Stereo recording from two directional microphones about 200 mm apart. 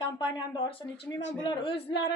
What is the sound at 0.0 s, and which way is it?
A woman's voice, 20° left (ahead or behind).